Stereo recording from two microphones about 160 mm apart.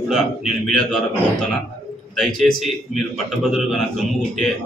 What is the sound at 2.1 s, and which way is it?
A man's voice, centre (ahead or behind).